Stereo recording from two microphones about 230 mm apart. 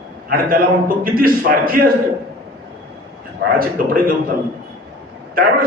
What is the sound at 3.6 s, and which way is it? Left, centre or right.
Speech, right.